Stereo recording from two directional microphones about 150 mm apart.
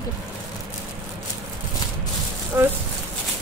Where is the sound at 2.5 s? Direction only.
20° right (ahead or behind).